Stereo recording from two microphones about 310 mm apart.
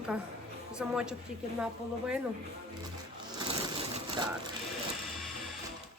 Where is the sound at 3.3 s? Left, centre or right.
Centre.